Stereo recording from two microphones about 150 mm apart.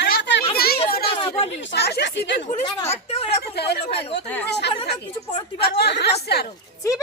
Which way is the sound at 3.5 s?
90° left.